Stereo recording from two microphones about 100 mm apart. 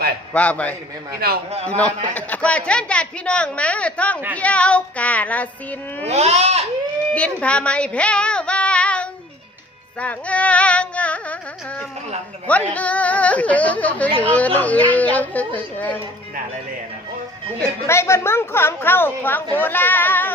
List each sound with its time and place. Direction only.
0.3 s speech: 15° left (ahead or behind)
6.1 s speech: 90° right
7.1 s speech: 15° left (ahead or behind)
10.0 s carnatic music: 15° left (ahead or behind)
12.5 s speech: 15° left (ahead or behind)
17.8 s a woman's voice: 25° left (ahead or behind)